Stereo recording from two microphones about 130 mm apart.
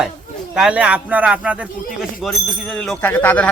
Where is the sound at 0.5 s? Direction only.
5° right (ahead or behind).